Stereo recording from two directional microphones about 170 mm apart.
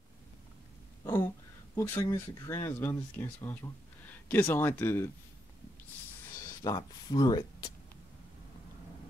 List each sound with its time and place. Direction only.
1.0 s a sound: 15° left (ahead or behind)
1.8 s speech: 15° left (ahead or behind)
6.4 s speech: 20° left (ahead or behind)